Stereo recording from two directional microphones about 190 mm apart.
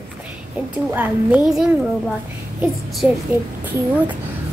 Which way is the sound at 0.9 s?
10° right (ahead or behind).